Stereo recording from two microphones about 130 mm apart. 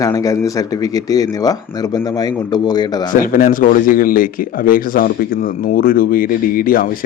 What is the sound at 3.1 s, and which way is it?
A man's voice, 90° left.